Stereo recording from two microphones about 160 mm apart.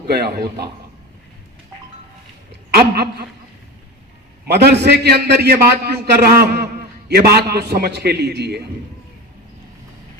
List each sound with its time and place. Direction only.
0.1 s a man's voice: 85° right
2.5 s a woman's voice: 80° right
4.4 s a man's voice: 90° right